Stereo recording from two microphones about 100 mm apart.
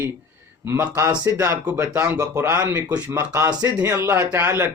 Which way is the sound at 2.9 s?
15° right (ahead or behind).